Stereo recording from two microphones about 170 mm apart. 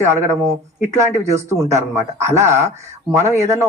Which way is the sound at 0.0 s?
15° right (ahead or behind).